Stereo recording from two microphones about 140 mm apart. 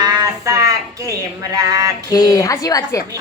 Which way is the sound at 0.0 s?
30° right (ahead or behind).